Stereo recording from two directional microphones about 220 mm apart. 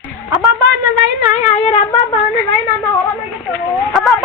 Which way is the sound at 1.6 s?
30° left (ahead or behind).